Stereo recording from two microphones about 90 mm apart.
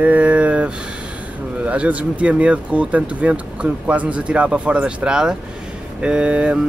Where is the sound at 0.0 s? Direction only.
15° right (ahead or behind).